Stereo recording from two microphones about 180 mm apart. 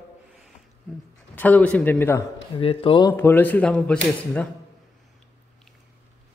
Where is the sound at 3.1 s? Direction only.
10° left (ahead or behind).